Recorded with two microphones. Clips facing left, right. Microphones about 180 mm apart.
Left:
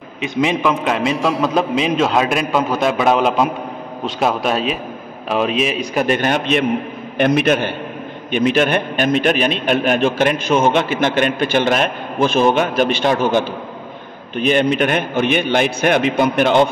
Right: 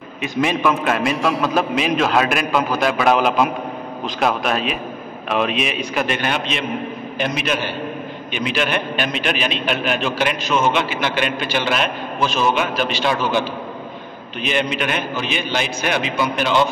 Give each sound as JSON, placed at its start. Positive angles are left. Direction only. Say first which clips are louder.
{"t": 0.2, "sound": "a man's voice", "louder": "left 2 dB", "side_deg": 20}
{"t": 1.1, "sound": "a man's voice", "louder": "left 2 dB", "side_deg": 0}
{"t": 1.5, "sound": "a man's voice", "louder": "left 2 dB", "side_deg": 25}
{"t": 4.5, "sound": "a man's voice", "louder": "left 2 dB", "side_deg": 30}